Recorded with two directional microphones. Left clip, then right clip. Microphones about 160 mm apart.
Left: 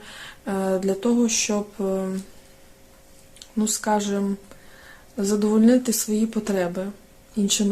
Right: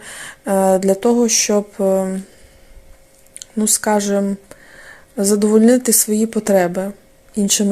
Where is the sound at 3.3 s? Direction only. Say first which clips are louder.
Right 7 dB; 40° right (ahead or behind).